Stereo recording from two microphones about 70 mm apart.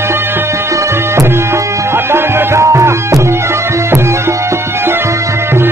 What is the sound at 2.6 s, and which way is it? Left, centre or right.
Music, right.